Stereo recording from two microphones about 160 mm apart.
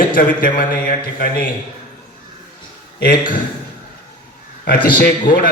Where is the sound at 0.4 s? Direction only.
60° left (ahead or behind).